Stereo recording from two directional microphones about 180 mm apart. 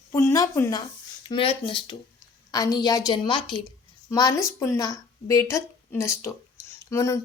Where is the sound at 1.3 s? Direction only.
30° left (ahead or behind).